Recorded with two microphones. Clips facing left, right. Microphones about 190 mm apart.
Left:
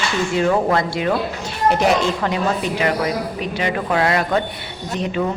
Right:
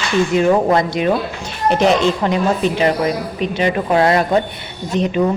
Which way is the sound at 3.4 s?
25° right (ahead or behind).